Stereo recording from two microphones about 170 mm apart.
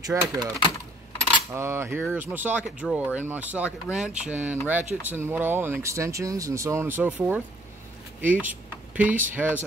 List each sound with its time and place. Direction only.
0.0 s speech: 20° right (ahead or behind)
1.5 s speech: 15° right (ahead or behind)
8.2 s vehicle: 10° right (ahead or behind)
9.2 s speech: 10° right (ahead or behind)